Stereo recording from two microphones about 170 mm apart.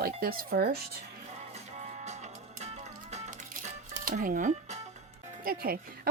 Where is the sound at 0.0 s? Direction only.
60° right (ahead or behind).